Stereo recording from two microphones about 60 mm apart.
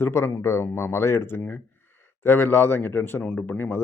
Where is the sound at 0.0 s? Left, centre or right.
Left.